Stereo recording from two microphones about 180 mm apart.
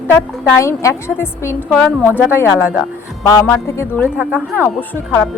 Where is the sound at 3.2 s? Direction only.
15° left (ahead or behind).